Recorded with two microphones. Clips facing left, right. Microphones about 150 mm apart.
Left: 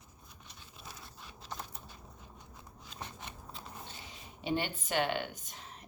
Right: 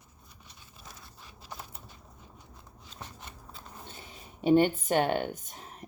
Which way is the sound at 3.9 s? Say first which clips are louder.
Right 2 dB; 50° right (ahead or behind).